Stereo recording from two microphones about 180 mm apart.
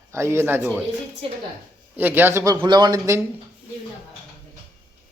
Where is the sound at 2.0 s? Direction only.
10° right (ahead or behind).